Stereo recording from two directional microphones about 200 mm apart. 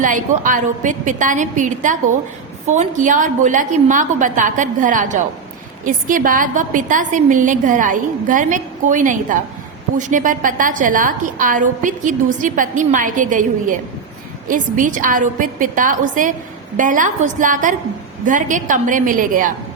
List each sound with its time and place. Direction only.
0.0 s a woman's voice: 40° right (ahead or behind)